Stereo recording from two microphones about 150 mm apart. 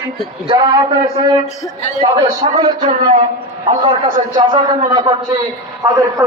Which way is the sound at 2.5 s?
25° right (ahead or behind).